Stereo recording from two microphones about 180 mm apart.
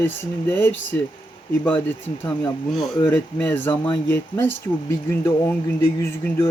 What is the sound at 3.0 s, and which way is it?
Speech, 10° left (ahead or behind).